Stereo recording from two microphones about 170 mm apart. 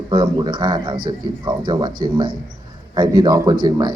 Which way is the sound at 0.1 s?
25° right (ahead or behind).